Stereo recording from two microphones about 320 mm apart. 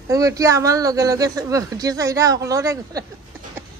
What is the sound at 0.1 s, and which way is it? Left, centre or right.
Speech, centre.